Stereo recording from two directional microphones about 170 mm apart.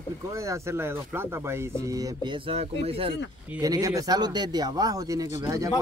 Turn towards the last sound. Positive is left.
turn(degrees=-20)  # may be behind; listen again after turning